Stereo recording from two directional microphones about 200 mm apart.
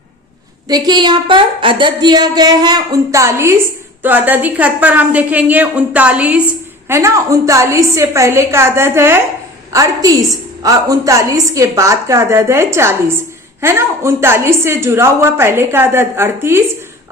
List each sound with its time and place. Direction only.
0.7 s a woman's voice: 20° right (ahead or behind)